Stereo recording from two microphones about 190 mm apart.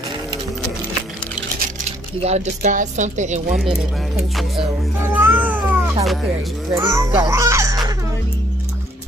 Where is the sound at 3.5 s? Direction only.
Centre (ahead or behind).